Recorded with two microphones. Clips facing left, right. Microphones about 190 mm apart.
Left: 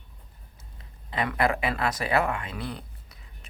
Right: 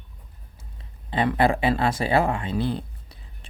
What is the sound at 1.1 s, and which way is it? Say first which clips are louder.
Speech: right 5 dB; 30° right (ahead or behind).